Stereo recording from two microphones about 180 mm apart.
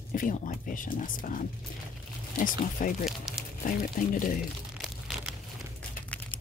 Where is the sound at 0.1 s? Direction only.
50° left (ahead or behind).